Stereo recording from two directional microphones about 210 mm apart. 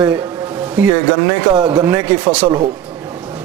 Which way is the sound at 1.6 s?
15° right (ahead or behind).